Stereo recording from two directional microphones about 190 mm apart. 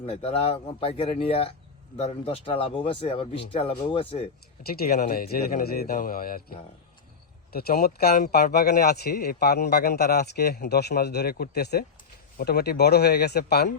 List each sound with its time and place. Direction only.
0.0 s speech: 30° left (ahead or behind)
4.6 s speech: 55° left (ahead or behind)